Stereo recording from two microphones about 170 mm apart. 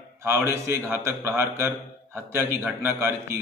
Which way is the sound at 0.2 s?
15° right (ahead or behind).